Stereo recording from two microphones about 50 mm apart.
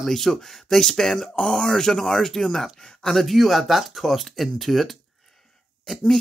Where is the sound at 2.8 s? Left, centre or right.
Centre.